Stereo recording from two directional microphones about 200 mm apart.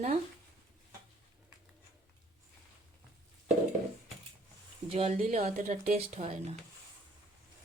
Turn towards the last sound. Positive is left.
turn(degrees=-30)  # may be behind; listen again after turning